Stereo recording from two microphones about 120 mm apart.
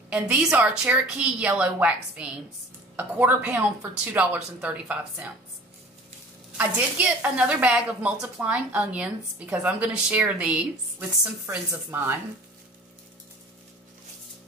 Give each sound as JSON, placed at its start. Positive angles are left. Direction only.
{"t": 0.1, "sound": "a woman's voice", "side_deg": -10}
{"t": 6.5, "sound": "a woman's voice", "side_deg": -10}